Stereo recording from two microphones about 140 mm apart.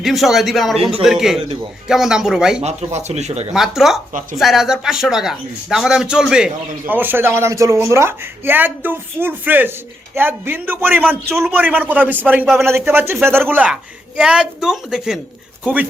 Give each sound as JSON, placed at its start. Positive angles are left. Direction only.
{"t": 0.0, "sound": "a woman's voice", "side_deg": 0}
{"t": 2.6, "sound": "speech", "side_deg": -50}
{"t": 3.5, "sound": "a woman's voice", "side_deg": 0}